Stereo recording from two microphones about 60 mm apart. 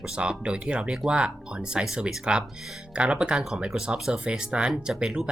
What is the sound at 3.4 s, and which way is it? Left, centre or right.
Speech, centre.